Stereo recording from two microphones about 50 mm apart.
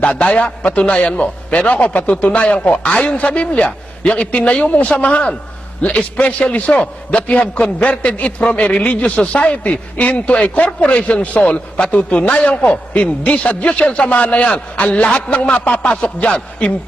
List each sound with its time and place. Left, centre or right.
0.0 s a man's voice: left